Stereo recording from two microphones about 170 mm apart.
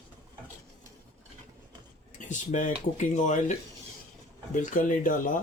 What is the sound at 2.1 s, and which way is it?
Speech, 45° left (ahead or behind).